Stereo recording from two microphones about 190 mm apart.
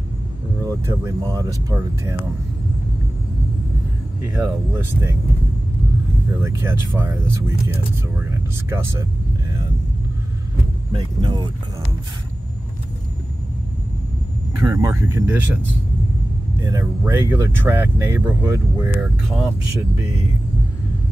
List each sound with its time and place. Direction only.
0.7 s speech: 15° right (ahead or behind)
4.3 s speech: 15° right (ahead or behind)
6.4 s speech: 15° right (ahead or behind)
8.3 s speech: 15° right (ahead or behind)
10.9 s speech: 25° right (ahead or behind)
14.6 s speech: 20° right (ahead or behind)
16.6 s speech: 15° right (ahead or behind)